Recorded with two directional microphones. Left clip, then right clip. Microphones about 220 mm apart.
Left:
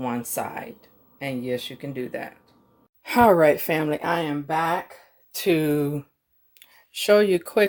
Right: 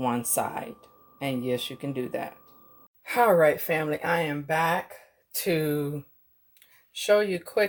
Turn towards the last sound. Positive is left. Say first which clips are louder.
# left 5 dB
turn(degrees=45)  # may be behind; listen again after turning